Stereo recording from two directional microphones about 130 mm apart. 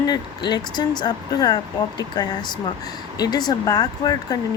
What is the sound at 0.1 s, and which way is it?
Speech, 35° left (ahead or behind).